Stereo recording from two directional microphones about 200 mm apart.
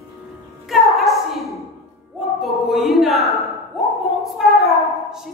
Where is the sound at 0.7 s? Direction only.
Centre (ahead or behind).